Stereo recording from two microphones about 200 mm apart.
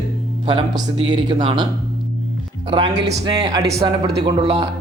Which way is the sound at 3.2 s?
20° right (ahead or behind).